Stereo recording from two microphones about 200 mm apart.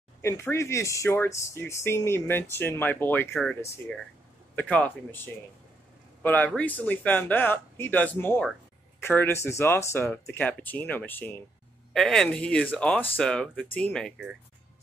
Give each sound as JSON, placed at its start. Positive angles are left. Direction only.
{"t": 0.2, "sound": "speech", "side_deg": 15}